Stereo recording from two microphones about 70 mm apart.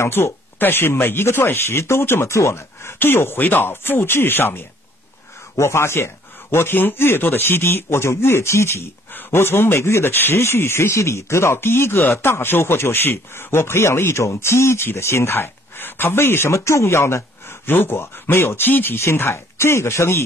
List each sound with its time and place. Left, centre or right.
0.0 s speech: left